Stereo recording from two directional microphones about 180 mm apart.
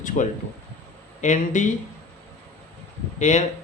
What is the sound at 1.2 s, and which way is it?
Speech, 45° left (ahead or behind).